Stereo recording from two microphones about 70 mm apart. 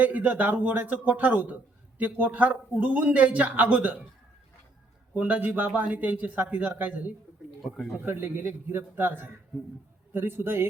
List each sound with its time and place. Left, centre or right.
0.0 s a man's voice: right
5.1 s a man's voice: right